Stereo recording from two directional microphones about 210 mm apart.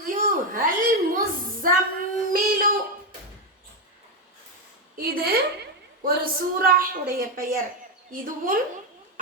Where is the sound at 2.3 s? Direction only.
45° right (ahead or behind).